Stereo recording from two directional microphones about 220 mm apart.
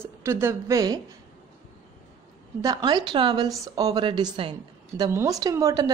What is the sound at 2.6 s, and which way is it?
A woman's voice, 15° right (ahead or behind).